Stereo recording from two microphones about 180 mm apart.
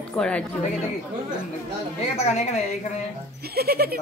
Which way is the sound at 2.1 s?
40° left (ahead or behind).